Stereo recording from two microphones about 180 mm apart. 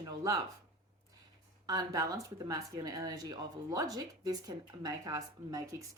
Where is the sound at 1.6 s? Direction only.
20° right (ahead or behind).